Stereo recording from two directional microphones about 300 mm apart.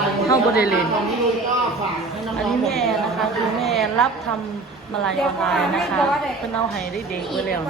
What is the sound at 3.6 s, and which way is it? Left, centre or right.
Speech, centre.